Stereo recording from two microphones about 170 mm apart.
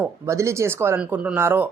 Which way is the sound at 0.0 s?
15° right (ahead or behind).